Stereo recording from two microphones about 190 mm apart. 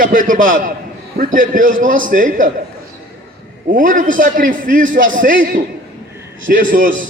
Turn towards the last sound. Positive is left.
turn(degrees=-45)  # may be behind; listen again after turning